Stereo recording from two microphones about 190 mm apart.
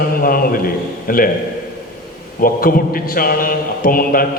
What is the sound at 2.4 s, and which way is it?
A man's voice, 50° left (ahead or behind).